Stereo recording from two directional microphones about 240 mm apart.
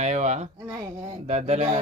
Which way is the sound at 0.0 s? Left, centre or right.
Right.